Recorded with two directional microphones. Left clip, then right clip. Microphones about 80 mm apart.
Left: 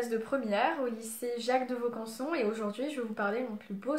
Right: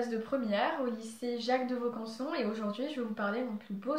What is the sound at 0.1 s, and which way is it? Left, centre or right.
A woman's voice, left.